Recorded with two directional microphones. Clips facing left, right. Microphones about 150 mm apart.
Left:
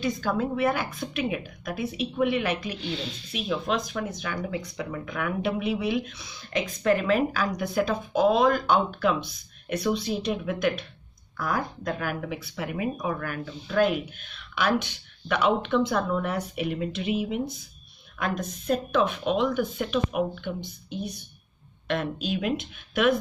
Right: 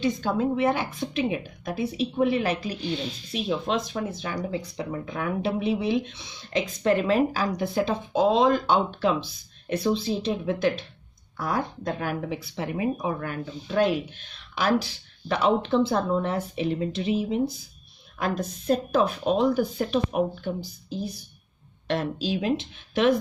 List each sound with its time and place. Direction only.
0.0 s speech: 25° right (ahead or behind)